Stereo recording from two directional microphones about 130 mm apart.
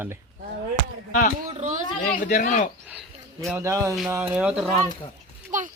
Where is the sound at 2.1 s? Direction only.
85° left.